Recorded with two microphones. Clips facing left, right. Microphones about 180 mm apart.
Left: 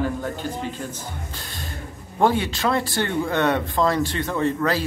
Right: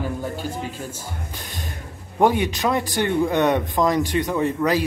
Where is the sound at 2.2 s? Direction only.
15° right (ahead or behind).